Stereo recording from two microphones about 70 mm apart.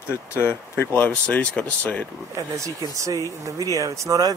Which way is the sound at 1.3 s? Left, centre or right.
Centre.